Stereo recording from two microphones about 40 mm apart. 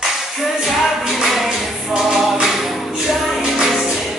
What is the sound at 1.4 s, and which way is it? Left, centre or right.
Music, centre.